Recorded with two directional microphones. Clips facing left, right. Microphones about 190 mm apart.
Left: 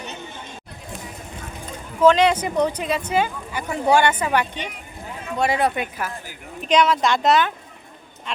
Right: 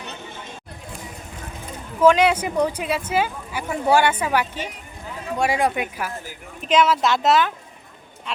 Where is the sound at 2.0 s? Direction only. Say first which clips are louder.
Even; 10° right (ahead or behind).